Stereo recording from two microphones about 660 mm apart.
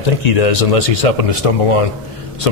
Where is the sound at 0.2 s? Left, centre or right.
Left.